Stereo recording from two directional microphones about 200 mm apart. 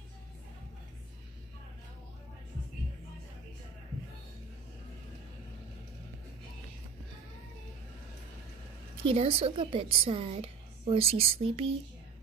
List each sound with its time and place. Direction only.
9.0 s a woman's voice: 30° right (ahead or behind)